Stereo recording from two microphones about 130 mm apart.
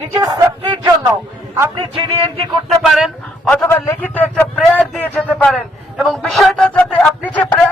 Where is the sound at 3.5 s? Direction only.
15° left (ahead or behind).